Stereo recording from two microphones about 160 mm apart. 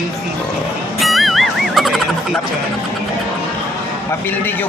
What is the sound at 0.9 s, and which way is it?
Music, centre (ahead or behind).